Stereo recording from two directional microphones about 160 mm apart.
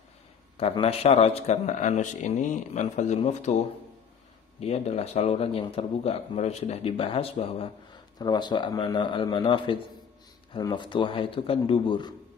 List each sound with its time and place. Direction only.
0.6 s a man's voice: 40° left (ahead or behind)
4.6 s speech: 40° left (ahead or behind)
8.2 s speech: 25° left (ahead or behind)